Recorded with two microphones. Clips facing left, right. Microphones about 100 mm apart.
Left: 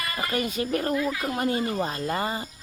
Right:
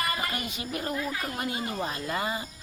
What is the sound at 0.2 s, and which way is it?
Speech, 45° left (ahead or behind).